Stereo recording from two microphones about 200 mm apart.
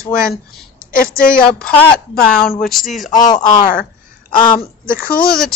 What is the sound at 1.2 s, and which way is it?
Speech, 5° left (ahead or behind).